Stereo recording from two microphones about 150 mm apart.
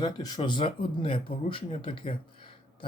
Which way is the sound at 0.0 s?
30° left (ahead or behind).